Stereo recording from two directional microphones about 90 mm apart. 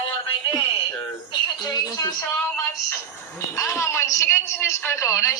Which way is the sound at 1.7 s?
45° left (ahead or behind).